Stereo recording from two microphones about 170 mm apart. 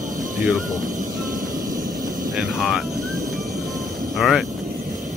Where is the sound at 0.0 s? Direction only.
50° right (ahead or behind).